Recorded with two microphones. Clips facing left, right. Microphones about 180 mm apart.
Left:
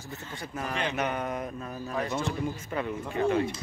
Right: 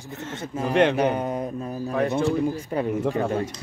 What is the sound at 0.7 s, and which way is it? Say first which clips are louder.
Speech: right 14 dB; 75° right (ahead or behind).